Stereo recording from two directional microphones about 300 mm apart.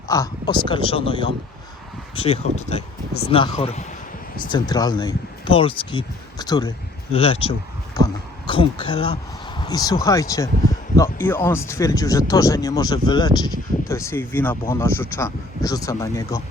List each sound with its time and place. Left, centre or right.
0.1 s speech: centre
2.1 s speech: centre